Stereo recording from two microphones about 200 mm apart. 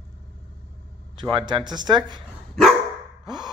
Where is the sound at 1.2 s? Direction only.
25° right (ahead or behind).